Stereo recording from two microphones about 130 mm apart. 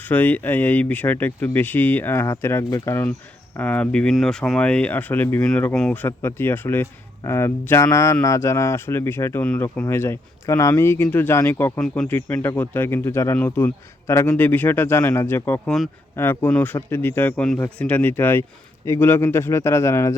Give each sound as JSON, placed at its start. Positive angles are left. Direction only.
{"t": 0.0, "sound": "speech", "side_deg": 15}